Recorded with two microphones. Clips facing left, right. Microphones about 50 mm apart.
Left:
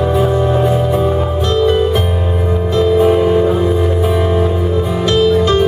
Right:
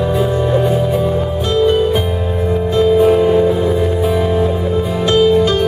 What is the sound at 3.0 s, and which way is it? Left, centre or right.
Music, centre.